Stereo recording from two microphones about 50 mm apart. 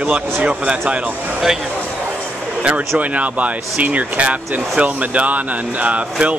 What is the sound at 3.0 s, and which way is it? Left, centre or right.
Speech, right.